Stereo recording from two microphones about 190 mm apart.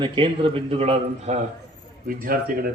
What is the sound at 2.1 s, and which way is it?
Speech, 50° right (ahead or behind).